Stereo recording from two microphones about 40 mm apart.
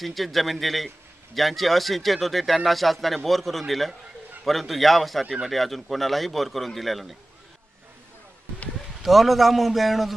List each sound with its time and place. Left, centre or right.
0.0 s speech: centre
5.2 s speech: centre
5.5 s speech: centre
9.0 s speech: centre